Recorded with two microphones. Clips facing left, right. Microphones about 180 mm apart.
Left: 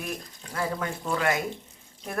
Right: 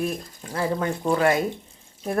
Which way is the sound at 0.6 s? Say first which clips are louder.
Right 5 dB; 30° right (ahead or behind).